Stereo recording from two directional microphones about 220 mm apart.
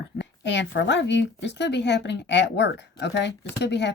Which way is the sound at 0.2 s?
55° left (ahead or behind).